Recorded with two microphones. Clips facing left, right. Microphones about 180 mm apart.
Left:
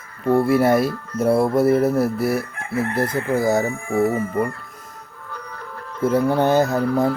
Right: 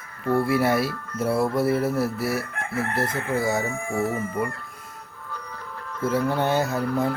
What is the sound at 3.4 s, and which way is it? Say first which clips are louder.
Speech: left 6 dB; 40° left (ahead or behind).